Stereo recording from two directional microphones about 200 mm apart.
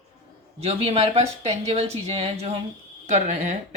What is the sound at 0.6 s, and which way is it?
Speech, 30° right (ahead or behind).